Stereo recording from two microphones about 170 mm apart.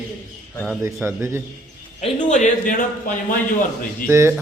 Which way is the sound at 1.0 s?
15° right (ahead or behind).